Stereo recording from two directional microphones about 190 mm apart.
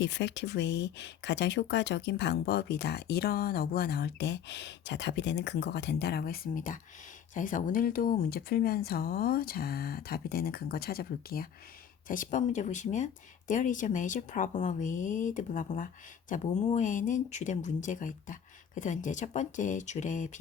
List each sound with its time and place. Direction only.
0.0 s speech: 70° left (ahead or behind); by 20.4 s 40° left (ahead or behind)